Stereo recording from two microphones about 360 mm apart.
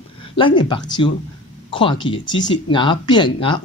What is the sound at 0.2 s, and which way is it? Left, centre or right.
A woman's voice, centre.